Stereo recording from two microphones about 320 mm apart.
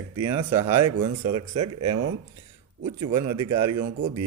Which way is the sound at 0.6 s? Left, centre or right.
Right.